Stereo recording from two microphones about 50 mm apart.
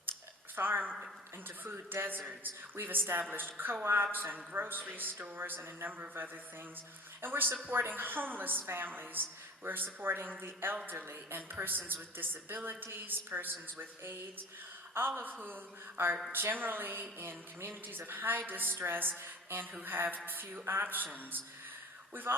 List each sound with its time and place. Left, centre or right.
0.5 s a woman's voice: right